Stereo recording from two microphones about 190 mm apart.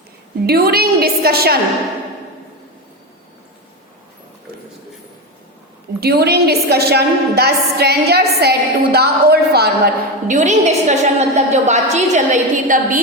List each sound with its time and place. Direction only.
0.4 s a woman's voice: 55° right (ahead or behind)
6.0 s a woman's voice: 55° right (ahead or behind)
10.2 s a woman's voice: 40° right (ahead or behind)